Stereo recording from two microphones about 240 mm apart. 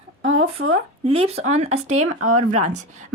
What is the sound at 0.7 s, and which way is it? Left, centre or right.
Speech, right.